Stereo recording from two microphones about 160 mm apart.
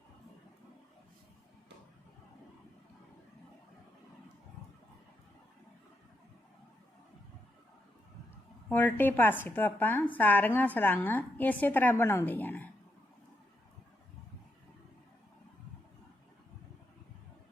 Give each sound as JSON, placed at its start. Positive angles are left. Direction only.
{"t": 8.7, "sound": "speech", "side_deg": 10}